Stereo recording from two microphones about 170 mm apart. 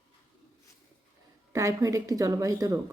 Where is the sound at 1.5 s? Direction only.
20° right (ahead or behind).